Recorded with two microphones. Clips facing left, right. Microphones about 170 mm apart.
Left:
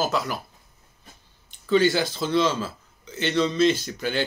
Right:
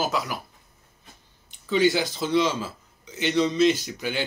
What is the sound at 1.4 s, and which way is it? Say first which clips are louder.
Speech: left 1 dB; 15° right (ahead or behind).